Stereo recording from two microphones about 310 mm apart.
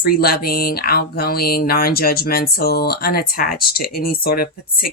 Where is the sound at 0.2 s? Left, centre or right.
Left.